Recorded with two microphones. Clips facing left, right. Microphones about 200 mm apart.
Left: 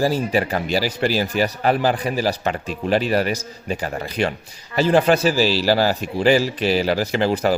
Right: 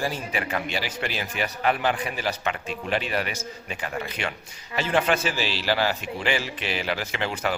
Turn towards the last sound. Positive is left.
turn(degrees=35)  # may be behind; listen again after turning